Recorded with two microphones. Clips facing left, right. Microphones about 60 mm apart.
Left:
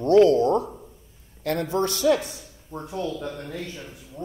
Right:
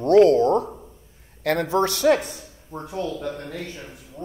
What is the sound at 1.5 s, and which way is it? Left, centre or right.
Speech, right.